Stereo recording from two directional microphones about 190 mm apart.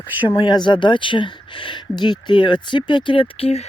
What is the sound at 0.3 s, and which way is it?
Speech, 25° left (ahead or behind).